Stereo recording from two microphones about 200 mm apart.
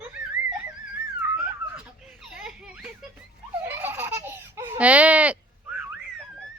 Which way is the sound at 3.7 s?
10° right (ahead or behind).